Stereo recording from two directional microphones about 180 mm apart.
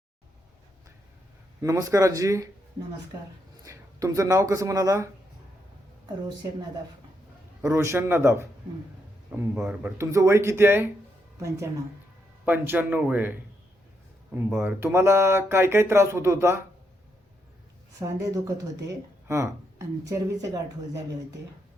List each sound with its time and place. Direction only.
1.6 s speech: 15° right (ahead or behind)
3.6 s speech: 20° right (ahead or behind)
7.6 s speech: 15° right (ahead or behind)
14.3 s speech: 10° right (ahead or behind)
18.0 s speech: 20° right (ahead or behind)